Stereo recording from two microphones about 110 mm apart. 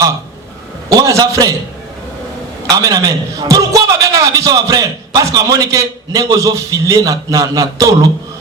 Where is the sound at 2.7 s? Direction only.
35° right (ahead or behind).